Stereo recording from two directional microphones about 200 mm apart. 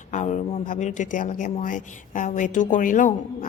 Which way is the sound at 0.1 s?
35° left (ahead or behind).